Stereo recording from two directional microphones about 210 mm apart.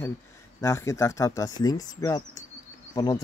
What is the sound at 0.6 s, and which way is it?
Speech, 15° left (ahead or behind).